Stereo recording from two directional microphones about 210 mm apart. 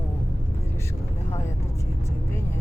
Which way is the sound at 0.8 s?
15° left (ahead or behind).